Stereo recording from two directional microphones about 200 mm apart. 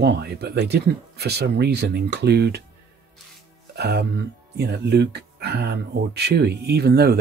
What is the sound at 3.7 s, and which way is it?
Speech, 55° right (ahead or behind).